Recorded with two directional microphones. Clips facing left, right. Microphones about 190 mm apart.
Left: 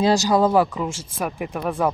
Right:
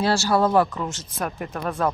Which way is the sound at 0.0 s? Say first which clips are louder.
Left 3 dB; 20° left (ahead or behind).